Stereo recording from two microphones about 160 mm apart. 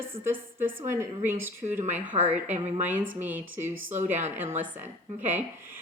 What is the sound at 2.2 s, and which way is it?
Speech, 50° right (ahead or behind).